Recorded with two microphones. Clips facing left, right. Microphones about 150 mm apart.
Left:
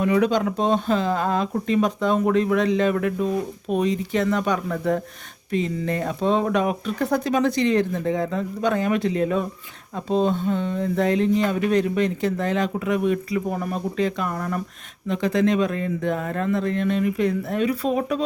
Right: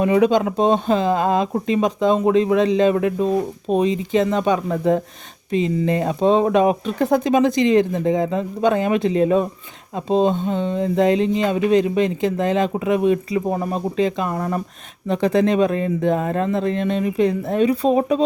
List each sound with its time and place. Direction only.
0.0 s speech: 25° right (ahead or behind)